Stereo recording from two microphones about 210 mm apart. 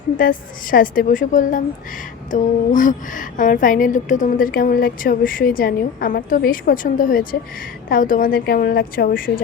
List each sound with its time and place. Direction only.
0.2 s a woman's voice: 40° left (ahead or behind)